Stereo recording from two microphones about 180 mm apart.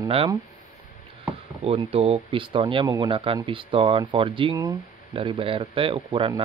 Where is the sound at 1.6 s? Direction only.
35° right (ahead or behind).